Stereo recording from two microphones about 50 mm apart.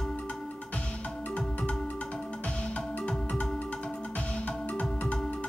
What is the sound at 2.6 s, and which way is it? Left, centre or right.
Music, centre.